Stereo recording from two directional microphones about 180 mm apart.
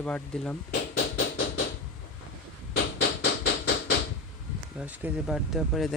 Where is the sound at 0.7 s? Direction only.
75° left (ahead or behind).